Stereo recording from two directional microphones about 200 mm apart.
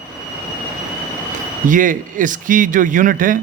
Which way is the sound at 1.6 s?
40° right (ahead or behind).